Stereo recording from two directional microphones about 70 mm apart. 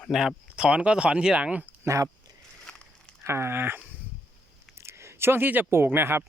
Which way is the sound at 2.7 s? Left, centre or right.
Centre.